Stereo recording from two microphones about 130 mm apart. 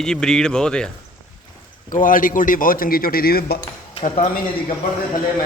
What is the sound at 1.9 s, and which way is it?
A man's voice, 90° left.